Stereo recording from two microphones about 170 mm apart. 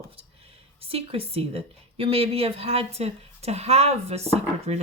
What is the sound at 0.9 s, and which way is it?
A woman's voice, 35° right (ahead or behind).